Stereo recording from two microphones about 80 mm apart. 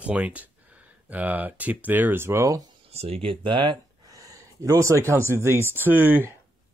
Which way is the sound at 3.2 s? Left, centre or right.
Right.